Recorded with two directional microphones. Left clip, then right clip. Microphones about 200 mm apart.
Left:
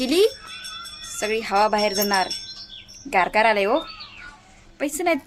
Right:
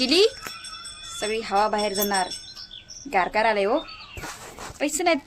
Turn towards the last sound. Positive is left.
turn(degrees=5)  # may be behind; listen again after turning